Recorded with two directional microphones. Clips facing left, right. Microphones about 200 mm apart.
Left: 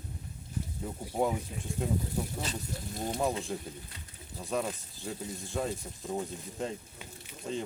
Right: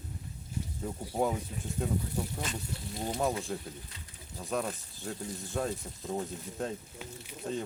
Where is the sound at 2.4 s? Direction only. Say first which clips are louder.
Left 1 dB; 35° left (ahead or behind).